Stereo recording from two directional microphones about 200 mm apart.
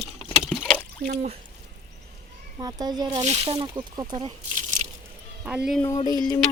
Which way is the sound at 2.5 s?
20° right (ahead or behind).